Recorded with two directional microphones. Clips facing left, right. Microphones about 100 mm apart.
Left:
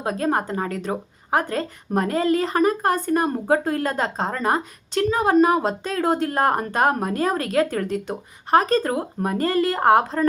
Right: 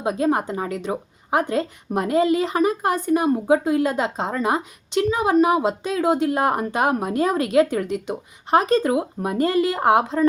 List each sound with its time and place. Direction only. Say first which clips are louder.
0.0 s a woman's voice: right 2 dB; 15° right (ahead or behind)